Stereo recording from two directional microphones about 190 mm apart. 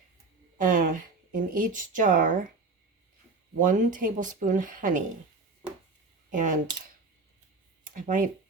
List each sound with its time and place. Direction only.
0.6 s speech: 45° right (ahead or behind)
3.6 s speech: 45° right (ahead or behind)
6.3 s speech: 40° right (ahead or behind)
7.9 s speech: 45° right (ahead or behind)